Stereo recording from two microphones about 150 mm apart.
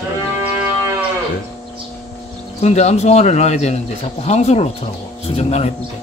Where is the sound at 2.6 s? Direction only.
45° left (ahead or behind).